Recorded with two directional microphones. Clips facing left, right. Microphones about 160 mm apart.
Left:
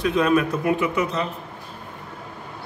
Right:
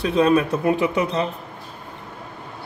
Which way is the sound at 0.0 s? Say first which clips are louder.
Right 2 dB; 30° right (ahead or behind).